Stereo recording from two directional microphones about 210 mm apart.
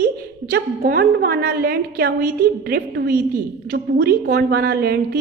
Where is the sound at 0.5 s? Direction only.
45° right (ahead or behind).